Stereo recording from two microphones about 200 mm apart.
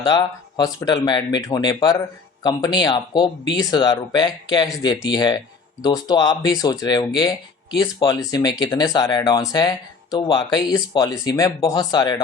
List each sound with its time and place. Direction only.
0.0 s speech: 20° left (ahead or behind)